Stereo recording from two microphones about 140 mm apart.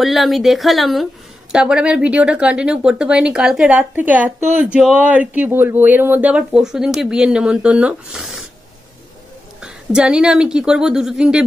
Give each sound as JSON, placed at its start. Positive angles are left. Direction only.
{"t": 0.0, "sound": "a woman's voice", "side_deg": 0}
{"t": 9.6, "sound": "a woman's voice", "side_deg": -5}